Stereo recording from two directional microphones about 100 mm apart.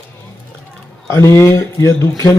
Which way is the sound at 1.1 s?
25° left (ahead or behind).